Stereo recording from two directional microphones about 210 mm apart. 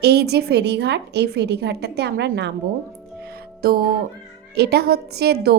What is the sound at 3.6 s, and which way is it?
A woman's voice, 50° right (ahead or behind).